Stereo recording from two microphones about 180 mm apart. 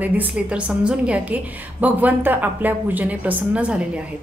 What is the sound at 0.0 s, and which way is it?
A woman's voice, 10° right (ahead or behind).